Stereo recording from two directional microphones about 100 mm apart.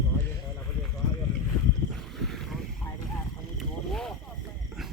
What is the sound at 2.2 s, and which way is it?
Boat, centre (ahead or behind).